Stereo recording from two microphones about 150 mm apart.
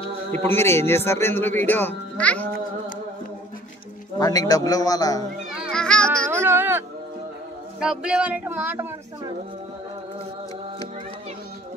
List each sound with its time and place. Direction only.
0.3 s a man's voice: 15° left (ahead or behind)
4.2 s a man's voice: 25° left (ahead or behind)
5.7 s speech: 5° left (ahead or behind)
6.0 s music: 15° right (ahead or behind)
7.8 s music: 5° right (ahead or behind)